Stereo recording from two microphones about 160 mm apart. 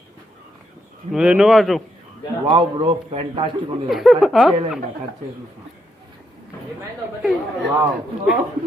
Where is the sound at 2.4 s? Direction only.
30° right (ahead or behind).